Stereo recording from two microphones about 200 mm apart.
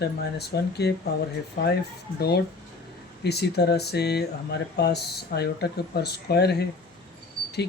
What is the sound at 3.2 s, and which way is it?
Speech, 55° left (ahead or behind).